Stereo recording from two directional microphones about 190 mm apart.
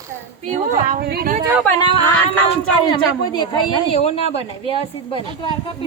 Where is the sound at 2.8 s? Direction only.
25° left (ahead or behind).